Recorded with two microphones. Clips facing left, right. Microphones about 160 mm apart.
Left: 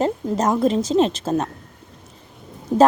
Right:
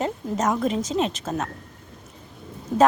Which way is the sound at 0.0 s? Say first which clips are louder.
Left 4 dB; 35° left (ahead or behind).